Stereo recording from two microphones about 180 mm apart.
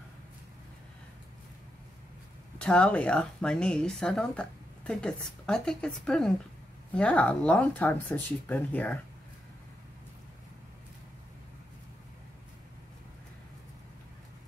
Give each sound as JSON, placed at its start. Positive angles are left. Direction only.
{"t": 2.6, "sound": "a woman's voice", "side_deg": 5}